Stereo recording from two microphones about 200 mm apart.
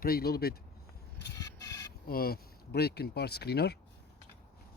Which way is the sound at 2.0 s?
50° left (ahead or behind).